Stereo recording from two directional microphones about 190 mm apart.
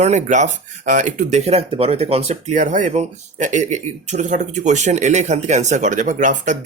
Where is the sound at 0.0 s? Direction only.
40° right (ahead or behind).